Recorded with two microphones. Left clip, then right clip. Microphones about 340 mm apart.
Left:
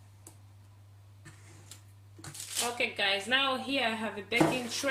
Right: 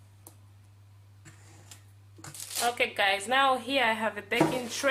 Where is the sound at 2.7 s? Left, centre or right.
Right.